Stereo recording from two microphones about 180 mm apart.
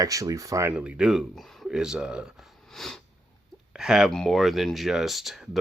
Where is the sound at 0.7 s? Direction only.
5° right (ahead or behind).